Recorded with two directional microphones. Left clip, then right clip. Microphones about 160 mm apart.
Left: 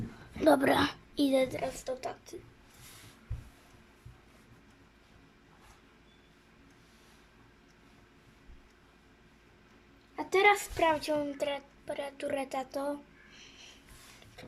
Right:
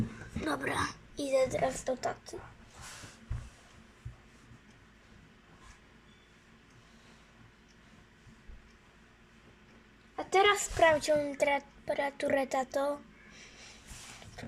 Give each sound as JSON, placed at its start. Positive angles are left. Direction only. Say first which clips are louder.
{"t": 0.4, "sound": "a child's voice", "louder": "left 8 dB", "side_deg": 35}
{"t": 1.5, "sound": "a woman's voice", "louder": "right 4 dB", "side_deg": 10}
{"t": 10.2, "sound": "a woman's voice", "louder": "left 1 dB", "side_deg": 25}